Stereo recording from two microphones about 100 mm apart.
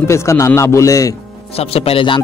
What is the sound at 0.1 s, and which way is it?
Speech, 30° left (ahead or behind).